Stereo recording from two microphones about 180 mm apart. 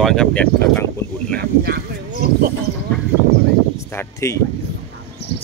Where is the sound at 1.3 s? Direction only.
60° right (ahead or behind).